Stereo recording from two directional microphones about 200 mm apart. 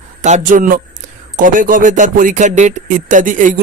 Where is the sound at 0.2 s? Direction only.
35° right (ahead or behind).